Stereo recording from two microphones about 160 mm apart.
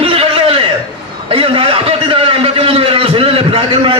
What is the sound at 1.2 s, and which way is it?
A man's voice, 35° right (ahead or behind).